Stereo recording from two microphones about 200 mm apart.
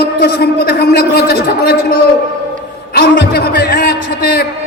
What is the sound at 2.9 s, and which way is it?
A man's voice, 50° left (ahead or behind).